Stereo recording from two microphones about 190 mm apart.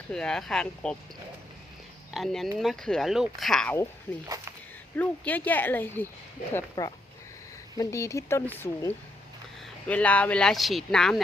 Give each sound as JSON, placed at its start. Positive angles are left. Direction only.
{"t": 0.1, "sound": "speech", "side_deg": 5}
{"t": 2.1, "sound": "speech", "side_deg": 0}